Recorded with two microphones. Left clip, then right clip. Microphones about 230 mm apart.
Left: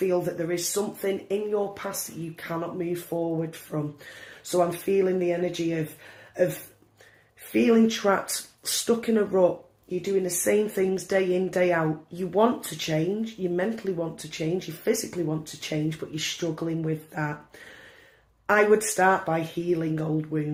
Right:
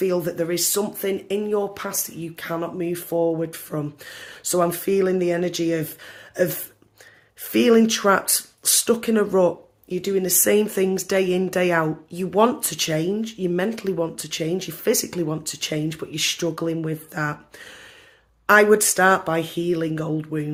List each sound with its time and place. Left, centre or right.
0.0 s speech: right
6.3 s a sound: right
7.5 s speech: right
18.4 s speech: right